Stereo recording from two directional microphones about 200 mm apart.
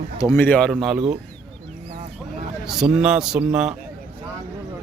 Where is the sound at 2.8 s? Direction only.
5° right (ahead or behind).